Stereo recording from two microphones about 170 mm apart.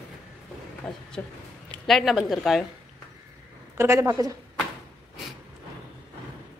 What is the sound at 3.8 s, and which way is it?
Speech, 15° right (ahead or behind).